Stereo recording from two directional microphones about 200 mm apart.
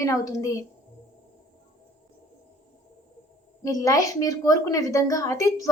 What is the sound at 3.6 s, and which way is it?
A woman's voice, 15° left (ahead or behind).